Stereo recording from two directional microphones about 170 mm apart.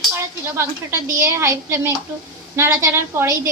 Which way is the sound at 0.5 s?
15° right (ahead or behind).